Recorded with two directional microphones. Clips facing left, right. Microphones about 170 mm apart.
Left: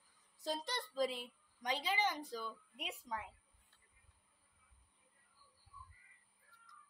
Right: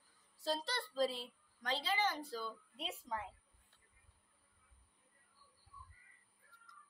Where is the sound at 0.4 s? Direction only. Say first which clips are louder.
Right 2 dB; 15° left (ahead or behind).